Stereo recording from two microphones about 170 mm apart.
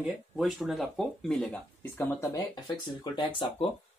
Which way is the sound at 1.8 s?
15° left (ahead or behind).